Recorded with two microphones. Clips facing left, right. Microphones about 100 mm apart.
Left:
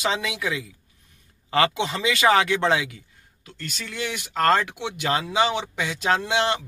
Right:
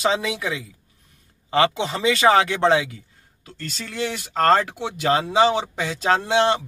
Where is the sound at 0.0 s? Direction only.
30° right (ahead or behind).